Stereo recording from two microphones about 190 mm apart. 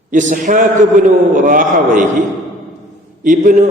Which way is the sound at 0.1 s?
40° right (ahead or behind).